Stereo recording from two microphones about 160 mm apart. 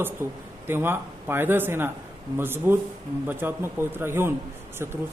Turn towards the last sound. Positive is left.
turn(degrees=-15)  # may be behind; listen again after turning